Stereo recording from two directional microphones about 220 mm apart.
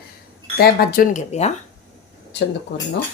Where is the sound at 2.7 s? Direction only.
50° left (ahead or behind).